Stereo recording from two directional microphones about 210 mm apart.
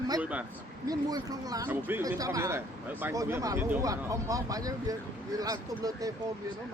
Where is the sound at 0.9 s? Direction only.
15° right (ahead or behind).